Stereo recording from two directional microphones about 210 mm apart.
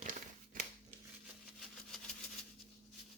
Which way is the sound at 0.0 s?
40° right (ahead or behind).